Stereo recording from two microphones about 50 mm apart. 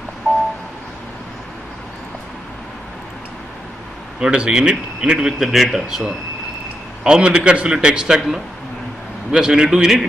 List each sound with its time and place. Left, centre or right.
4.2 s a man's voice: centre
5.4 s a man's voice: centre
7.0 s a man's voice: centre